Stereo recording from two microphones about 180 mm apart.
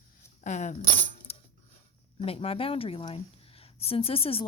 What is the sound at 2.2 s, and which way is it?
Speech, 30° left (ahead or behind).